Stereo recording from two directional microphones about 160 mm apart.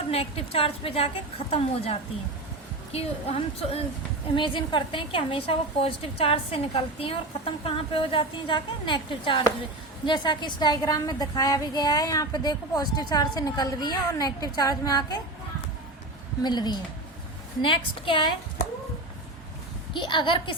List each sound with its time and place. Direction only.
0.1 s a woman's voice: 40° left (ahead or behind)
16.4 s a woman's voice: 25° left (ahead or behind)
19.9 s a woman's voice: 30° left (ahead or behind)